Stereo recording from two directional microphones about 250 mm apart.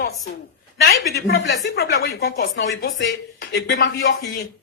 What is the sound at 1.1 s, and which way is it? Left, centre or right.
Speech, left.